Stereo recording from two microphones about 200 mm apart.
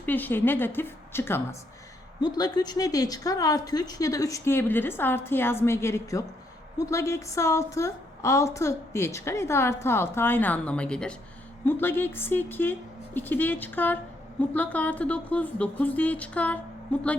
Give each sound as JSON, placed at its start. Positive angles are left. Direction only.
{"t": 0.0, "sound": "a woman's voice", "side_deg": 10}